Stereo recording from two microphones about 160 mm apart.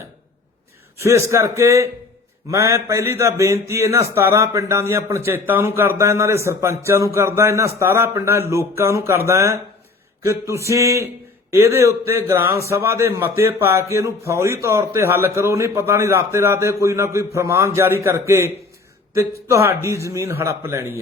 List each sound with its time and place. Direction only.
1.0 s a man's voice: 15° right (ahead or behind)
10.2 s a sound: 20° right (ahead or behind)
11.5 s a man's voice: 15° right (ahead or behind)